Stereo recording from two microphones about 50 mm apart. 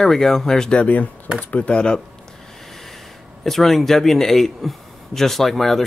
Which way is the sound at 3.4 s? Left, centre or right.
Centre.